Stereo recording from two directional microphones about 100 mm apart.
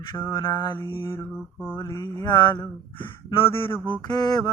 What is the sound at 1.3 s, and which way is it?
Mantra, 5° right (ahead or behind).